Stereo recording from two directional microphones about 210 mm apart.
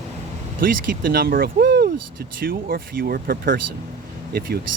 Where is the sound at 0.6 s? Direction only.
45° right (ahead or behind).